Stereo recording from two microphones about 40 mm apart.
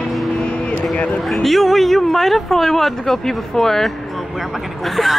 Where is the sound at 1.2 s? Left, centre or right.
Centre.